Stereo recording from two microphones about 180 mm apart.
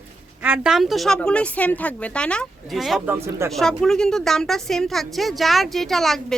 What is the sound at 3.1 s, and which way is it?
Speech, 15° right (ahead or behind).